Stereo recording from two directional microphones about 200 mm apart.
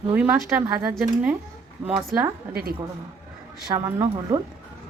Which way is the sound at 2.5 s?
50° right (ahead or behind).